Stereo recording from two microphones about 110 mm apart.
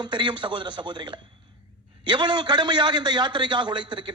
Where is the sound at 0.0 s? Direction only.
45° right (ahead or behind).